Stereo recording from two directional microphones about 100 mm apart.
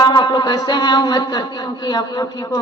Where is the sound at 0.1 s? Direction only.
45° left (ahead or behind).